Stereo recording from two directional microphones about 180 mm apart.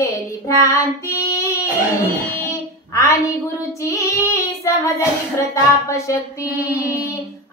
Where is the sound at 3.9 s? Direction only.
15° left (ahead or behind).